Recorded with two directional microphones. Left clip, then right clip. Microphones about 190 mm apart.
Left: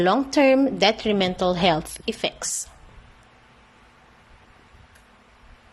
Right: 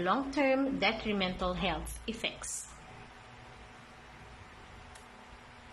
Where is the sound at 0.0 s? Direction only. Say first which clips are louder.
Left 12 dB; 45° left (ahead or behind).